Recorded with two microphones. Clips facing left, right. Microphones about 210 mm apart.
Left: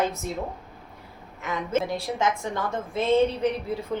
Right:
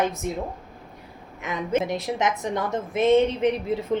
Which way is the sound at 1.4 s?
15° right (ahead or behind).